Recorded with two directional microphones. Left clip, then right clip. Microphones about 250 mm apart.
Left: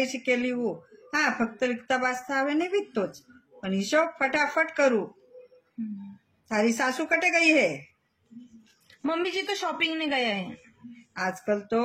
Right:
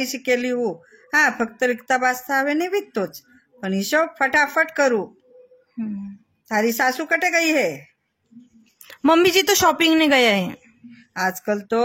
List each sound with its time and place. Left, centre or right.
0.0 s speech: right
6.5 s speech: right
8.8 s speech: right